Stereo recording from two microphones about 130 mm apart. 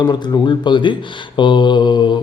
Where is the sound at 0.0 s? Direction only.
35° left (ahead or behind).